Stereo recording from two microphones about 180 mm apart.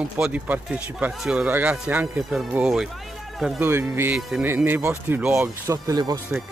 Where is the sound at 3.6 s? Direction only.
15° right (ahead or behind).